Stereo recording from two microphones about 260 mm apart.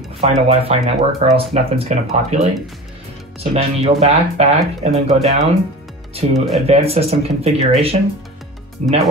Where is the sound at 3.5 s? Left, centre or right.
Right.